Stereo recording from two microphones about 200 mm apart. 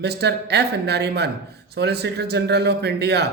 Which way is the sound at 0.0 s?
55° right (ahead or behind).